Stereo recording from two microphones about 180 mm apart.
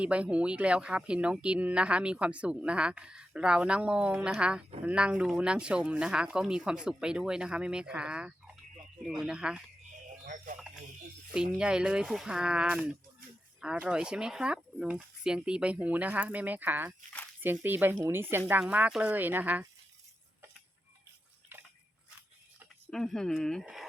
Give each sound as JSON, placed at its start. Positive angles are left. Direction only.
{"t": 0.0, "sound": "speech", "side_deg": -5}
{"t": 10.2, "sound": "music", "side_deg": -45}
{"t": 11.3, "sound": "speech", "side_deg": -5}
{"t": 21.5, "sound": "a sound", "side_deg": -10}
{"t": 22.9, "sound": "speech", "side_deg": 0}